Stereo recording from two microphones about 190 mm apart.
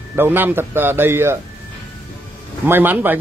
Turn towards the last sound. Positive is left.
turn(degrees=-10)  # may be behind; listen again after turning